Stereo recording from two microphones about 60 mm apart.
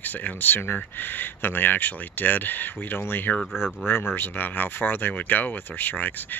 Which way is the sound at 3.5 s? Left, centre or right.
Centre.